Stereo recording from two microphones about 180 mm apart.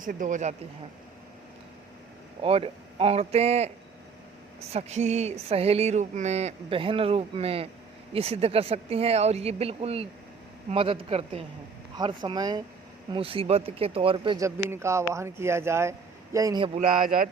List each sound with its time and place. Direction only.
0.0 s speech: 50° right (ahead or behind)
2.4 s a sound: 30° right (ahead or behind)
11.9 s speech: 25° right (ahead or behind)
13.1 s a sound: 30° right (ahead or behind)
14.7 s speech: 15° right (ahead or behind)
16.9 s speech: 50° right (ahead or behind)